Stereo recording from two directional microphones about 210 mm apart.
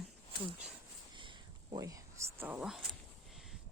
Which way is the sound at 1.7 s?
15° right (ahead or behind).